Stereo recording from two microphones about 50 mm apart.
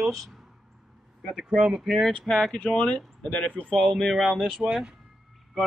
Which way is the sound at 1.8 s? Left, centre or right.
Centre.